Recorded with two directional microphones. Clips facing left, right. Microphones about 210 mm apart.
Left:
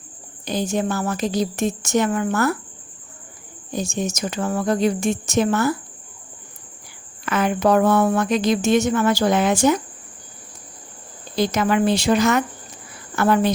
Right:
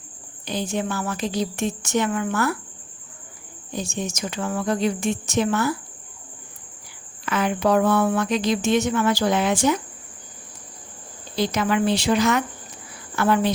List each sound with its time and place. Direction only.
0.4 s a woman's voice: 45° left (ahead or behind)
3.7 s speech: 45° left (ahead or behind)
7.3 s speech: 45° left (ahead or behind)
11.3 s speech: 45° left (ahead or behind)